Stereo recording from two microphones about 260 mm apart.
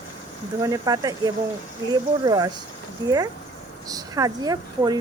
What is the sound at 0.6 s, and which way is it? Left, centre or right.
Speech, centre.